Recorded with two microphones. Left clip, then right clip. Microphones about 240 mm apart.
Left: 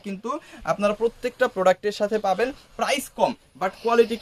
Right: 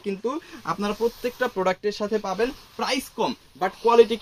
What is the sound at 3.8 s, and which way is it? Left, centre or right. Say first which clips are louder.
Speech: right 3 dB; left.